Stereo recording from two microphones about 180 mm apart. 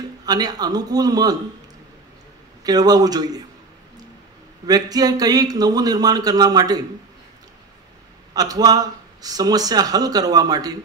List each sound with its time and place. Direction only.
0.2 s speech: 20° right (ahead or behind)
2.6 s speech: 20° right (ahead or behind)
4.6 s speech: 20° right (ahead or behind)
8.4 s speech: 20° right (ahead or behind)